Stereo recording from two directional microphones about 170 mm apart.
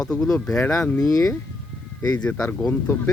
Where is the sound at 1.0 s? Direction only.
20° left (ahead or behind).